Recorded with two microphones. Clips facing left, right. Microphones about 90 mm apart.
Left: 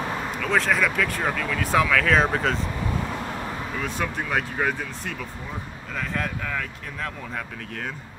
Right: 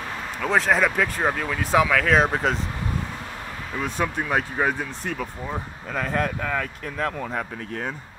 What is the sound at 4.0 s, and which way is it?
Speech, 30° right (ahead or behind).